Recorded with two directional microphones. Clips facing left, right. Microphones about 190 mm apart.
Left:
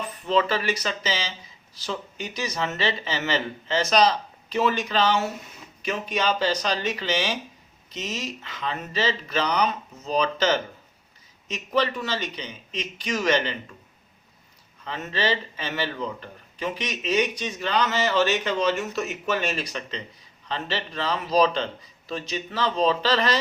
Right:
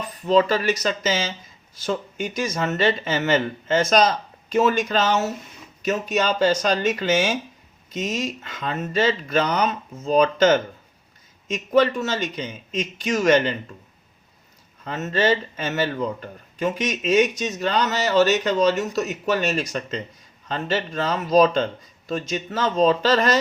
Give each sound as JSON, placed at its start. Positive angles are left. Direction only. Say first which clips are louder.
{"t": 0.3, "sound": "speech", "louder": "right 5 dB", "side_deg": -40}
{"t": 14.8, "sound": "speech", "louder": "right 5 dB", "side_deg": -45}